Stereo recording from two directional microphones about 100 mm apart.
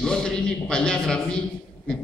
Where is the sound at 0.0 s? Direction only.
5° left (ahead or behind).